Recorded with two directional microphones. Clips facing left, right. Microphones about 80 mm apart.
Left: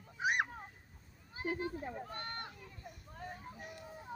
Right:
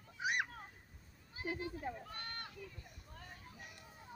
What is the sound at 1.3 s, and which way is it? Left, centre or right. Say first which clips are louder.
Speech: left 4 dB; left.